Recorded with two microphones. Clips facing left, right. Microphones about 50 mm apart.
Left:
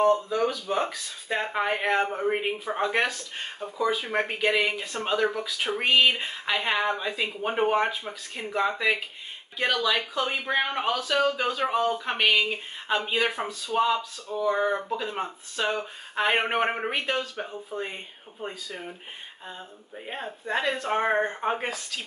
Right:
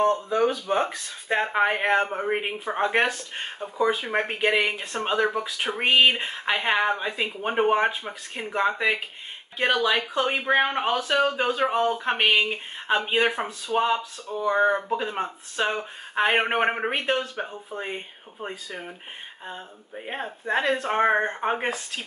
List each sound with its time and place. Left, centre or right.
0.5 s speech: right
7.2 s speech: centre; by 11.6 s right
11.6 s speech: centre